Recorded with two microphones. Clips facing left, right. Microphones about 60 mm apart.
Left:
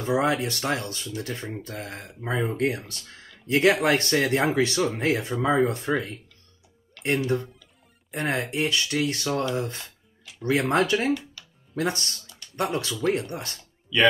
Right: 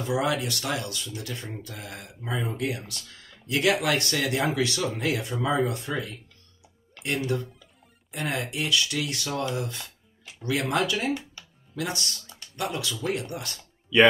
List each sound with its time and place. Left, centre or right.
0.0 s speech: left
7.3 s speech: left